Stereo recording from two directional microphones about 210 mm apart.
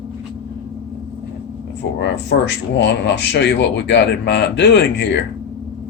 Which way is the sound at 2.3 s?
55° left (ahead or behind).